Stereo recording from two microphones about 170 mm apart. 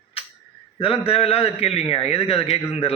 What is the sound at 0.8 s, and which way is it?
A man's voice, 35° left (ahead or behind).